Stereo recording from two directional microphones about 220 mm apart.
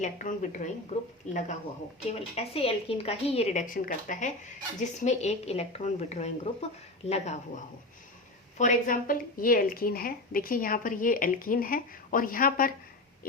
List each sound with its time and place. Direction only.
0.0 s a woman's voice: 35° left (ahead or behind)
8.5 s a woman's voice: 35° left (ahead or behind)